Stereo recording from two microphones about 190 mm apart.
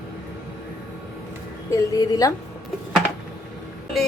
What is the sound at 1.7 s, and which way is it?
Speech, 20° left (ahead or behind).